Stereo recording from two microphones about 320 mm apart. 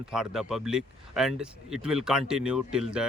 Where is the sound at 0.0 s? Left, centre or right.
Centre.